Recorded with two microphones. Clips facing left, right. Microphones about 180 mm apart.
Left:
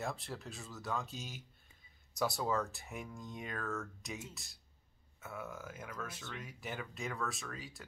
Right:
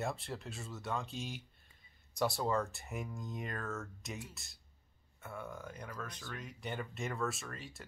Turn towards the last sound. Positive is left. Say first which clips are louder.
# even
turn(degrees=0)  # may be behind; listen again after turning